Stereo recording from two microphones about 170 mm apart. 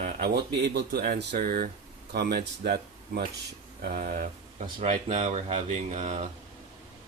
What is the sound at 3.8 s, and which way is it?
Speech, 55° right (ahead or behind).